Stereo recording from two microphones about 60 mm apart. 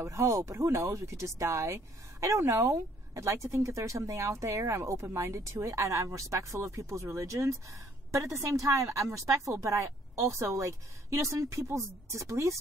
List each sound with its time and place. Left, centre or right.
0.0 s speech: right